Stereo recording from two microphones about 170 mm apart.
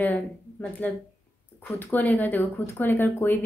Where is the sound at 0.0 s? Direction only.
10° left (ahead or behind).